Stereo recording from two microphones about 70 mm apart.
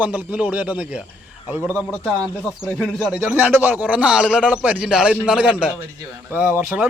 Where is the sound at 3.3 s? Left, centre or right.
Right.